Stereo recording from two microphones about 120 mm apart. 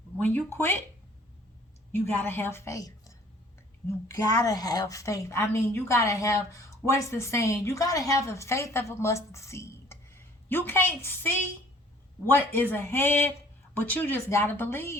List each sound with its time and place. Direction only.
0.2 s speech: 15° left (ahead or behind)
2.0 s a woman's voice: 15° left (ahead or behind)